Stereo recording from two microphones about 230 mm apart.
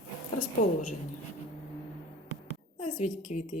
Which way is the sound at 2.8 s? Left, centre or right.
Left.